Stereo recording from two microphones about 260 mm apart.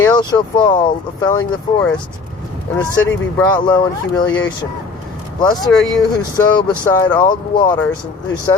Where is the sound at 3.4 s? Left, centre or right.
Centre.